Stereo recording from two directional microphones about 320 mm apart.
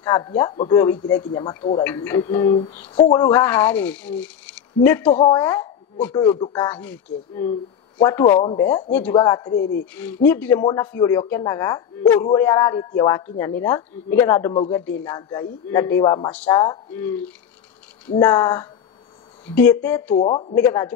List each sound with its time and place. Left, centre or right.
0.0 s a woman's voice: centre
4.2 s a sound: centre
4.8 s a woman's voice: centre
9.5 s speech: left
10.2 s a woman's voice: centre
20.2 s a woman's voice: centre